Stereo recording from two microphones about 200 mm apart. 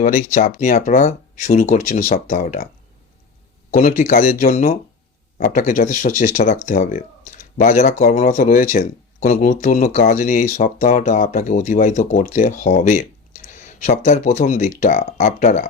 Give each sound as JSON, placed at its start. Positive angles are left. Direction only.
{"t": 0.0, "sound": "speech", "side_deg": 40}
{"t": 3.7, "sound": "speech", "side_deg": 40}